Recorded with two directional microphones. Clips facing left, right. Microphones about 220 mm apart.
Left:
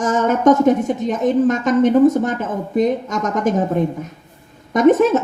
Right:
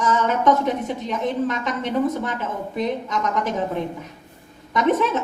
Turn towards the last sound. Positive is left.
turn(degrees=45)  # may be behind; listen again after turning